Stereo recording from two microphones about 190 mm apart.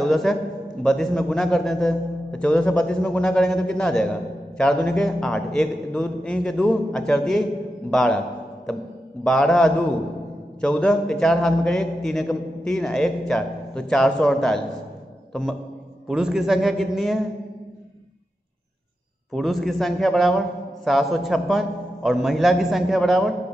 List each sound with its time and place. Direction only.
0.0 s a man's voice: centre (ahead or behind)
9.2 s a man's voice: 5° left (ahead or behind)
16.1 s a man's voice: 5° right (ahead or behind)
19.3 s a man's voice: centre (ahead or behind)